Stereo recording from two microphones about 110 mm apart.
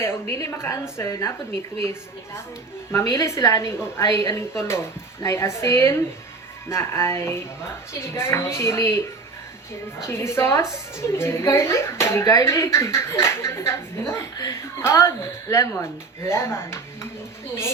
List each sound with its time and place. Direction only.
0.0 s a woman's voice: 25° left (ahead or behind)
4.0 s a woman's voice: 40° left (ahead or behind)
4.4 s a woman's voice: 25° left (ahead or behind)
10.1 s a woman's voice: 25° left (ahead or behind)
14.3 s a woman's voice: 35° left (ahead or behind)
14.8 s a woman's voice: 25° left (ahead or behind)